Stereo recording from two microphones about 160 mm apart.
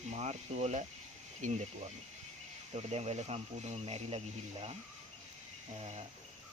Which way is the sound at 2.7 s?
40° right (ahead or behind).